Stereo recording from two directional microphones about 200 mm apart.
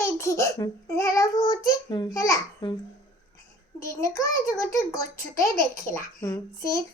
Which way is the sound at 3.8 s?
15° left (ahead or behind).